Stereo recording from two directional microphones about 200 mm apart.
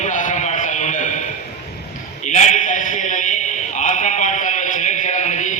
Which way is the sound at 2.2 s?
35° left (ahead or behind).